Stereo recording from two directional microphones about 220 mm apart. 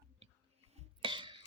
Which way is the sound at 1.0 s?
20° right (ahead or behind).